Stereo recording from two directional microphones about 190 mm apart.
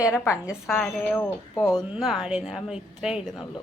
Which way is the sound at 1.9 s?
Centre (ahead or behind).